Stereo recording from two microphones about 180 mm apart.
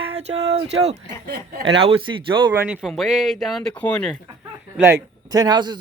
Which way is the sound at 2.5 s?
10° right (ahead or behind).